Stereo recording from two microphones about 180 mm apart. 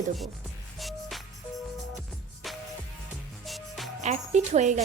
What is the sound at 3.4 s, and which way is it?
Music, centre (ahead or behind).